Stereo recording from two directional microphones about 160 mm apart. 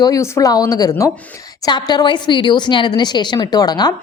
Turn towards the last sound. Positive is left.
turn(degrees=25)  # may be behind; listen again after turning